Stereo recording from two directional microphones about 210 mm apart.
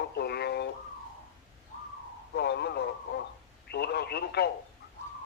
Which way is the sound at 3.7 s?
50° left (ahead or behind).